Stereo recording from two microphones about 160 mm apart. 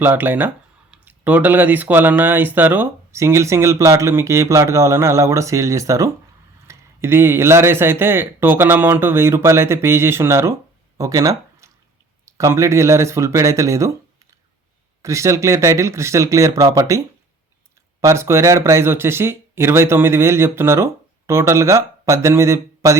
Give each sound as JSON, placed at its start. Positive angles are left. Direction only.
{"t": 0.0, "sound": "speech", "side_deg": -15}
{"t": 10.9, "sound": "a sound", "side_deg": -20}
{"t": 12.2, "sound": "speech", "side_deg": -20}
{"t": 15.0, "sound": "speech", "side_deg": -20}
{"t": 18.0, "sound": "speech", "side_deg": -15}